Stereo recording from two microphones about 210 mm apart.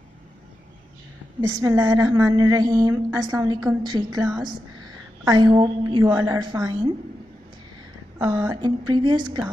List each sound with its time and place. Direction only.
1.5 s a woman's voice: 15° right (ahead or behind)
8.2 s a woman's voice: 15° right (ahead or behind)